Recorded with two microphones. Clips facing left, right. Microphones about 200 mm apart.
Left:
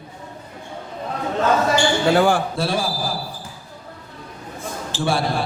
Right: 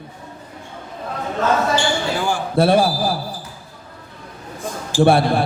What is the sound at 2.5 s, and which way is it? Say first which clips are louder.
Speech: right 8 dB; 55° right (ahead or behind).